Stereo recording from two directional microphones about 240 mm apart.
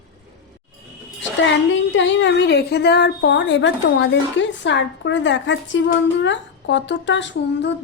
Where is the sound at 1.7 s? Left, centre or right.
Left.